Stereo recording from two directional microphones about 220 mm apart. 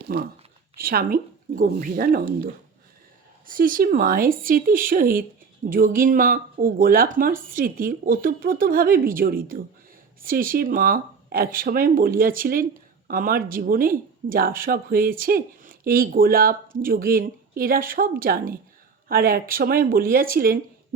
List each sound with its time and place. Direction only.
0.1 s speech: 45° right (ahead or behind)